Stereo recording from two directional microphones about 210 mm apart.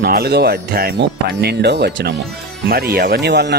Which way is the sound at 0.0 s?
45° right (ahead or behind).